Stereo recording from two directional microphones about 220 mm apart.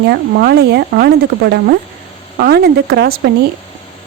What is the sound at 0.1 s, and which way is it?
Speech, 45° right (ahead or behind).